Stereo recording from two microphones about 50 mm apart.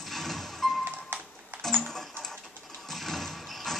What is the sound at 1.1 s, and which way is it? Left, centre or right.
Music, right.